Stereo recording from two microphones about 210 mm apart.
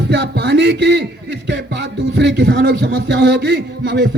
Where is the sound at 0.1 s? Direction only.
55° right (ahead or behind).